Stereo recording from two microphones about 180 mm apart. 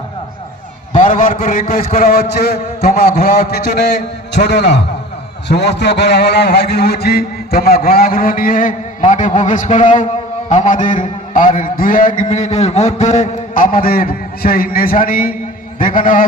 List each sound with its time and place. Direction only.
0.9 s a man's voice: 50° left (ahead or behind)